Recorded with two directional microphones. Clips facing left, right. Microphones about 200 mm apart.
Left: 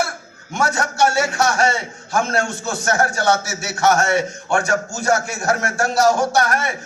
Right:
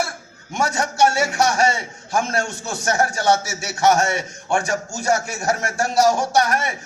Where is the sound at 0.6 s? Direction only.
15° right (ahead or behind).